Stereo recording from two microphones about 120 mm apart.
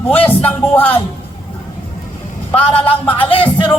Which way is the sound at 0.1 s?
15° left (ahead or behind).